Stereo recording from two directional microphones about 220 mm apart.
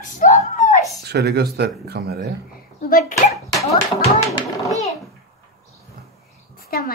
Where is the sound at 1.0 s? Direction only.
50° right (ahead or behind).